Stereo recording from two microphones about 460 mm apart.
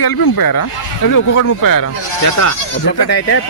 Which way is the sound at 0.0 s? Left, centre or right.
Left.